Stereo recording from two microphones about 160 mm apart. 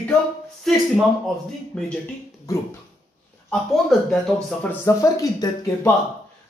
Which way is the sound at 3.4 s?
5° left (ahead or behind).